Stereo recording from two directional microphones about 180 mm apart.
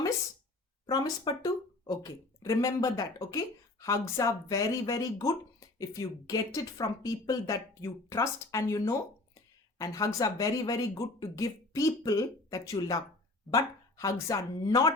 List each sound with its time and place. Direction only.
0.9 s speech: 20° left (ahead or behind)